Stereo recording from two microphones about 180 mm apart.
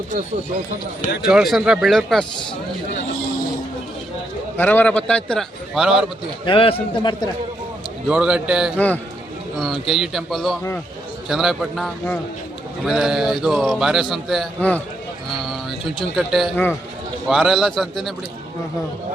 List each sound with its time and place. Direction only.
1.2 s a man's voice: 5° right (ahead or behind)
4.5 s a man's voice: 10° left (ahead or behind)
6.4 s a man's voice: 30° left (ahead or behind)
8.0 s a man's voice: 5° right (ahead or behind)
9.8 s a man's voice: centre (ahead or behind)
16.1 s a man's voice: centre (ahead or behind)